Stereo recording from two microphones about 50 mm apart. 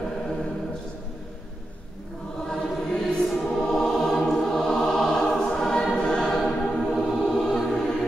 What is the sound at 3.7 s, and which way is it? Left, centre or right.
Choir, centre.